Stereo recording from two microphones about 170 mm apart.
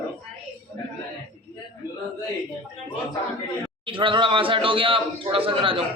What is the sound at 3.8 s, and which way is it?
Speech, 30° right (ahead or behind).